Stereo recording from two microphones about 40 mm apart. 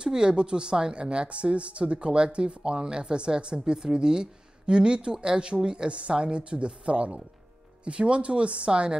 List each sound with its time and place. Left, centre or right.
0.0 s speech: right